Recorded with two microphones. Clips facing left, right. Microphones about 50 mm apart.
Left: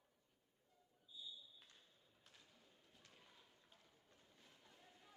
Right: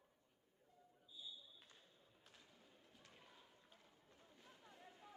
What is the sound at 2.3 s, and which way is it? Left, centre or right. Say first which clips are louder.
Run: right 1 dB; centre.